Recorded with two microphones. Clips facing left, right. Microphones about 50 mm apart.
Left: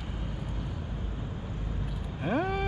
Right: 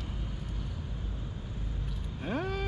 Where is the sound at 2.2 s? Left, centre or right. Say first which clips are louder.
Left 5 dB; centre.